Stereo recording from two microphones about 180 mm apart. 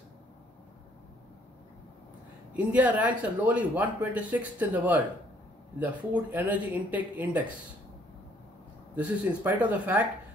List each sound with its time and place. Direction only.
2.5 s speech: 10° right (ahead or behind)
8.9 s speech: 10° right (ahead or behind)